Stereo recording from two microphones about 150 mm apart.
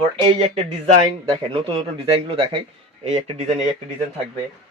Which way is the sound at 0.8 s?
35° right (ahead or behind).